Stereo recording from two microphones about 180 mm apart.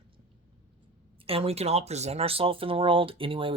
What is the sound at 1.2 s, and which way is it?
Speech, 35° right (ahead or behind).